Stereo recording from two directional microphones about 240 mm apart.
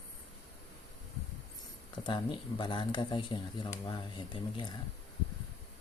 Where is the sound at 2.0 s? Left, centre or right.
Centre.